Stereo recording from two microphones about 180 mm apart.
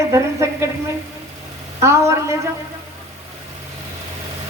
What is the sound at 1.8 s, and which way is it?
Speech, 15° right (ahead or behind).